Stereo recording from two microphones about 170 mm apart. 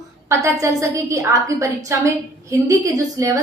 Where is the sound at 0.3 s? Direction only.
15° right (ahead or behind).